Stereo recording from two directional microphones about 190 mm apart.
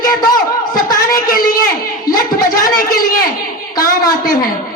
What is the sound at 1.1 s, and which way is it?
Speech, 50° left (ahead or behind).